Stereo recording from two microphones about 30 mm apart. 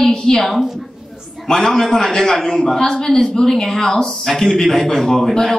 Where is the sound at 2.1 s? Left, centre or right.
Centre.